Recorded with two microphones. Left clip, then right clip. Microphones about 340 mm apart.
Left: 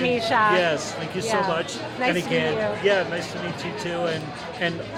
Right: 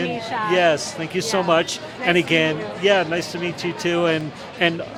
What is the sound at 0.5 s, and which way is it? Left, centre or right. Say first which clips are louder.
A man's voice: right 4 dB; right.